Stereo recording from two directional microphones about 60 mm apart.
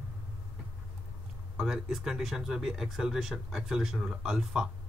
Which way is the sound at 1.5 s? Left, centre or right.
Centre.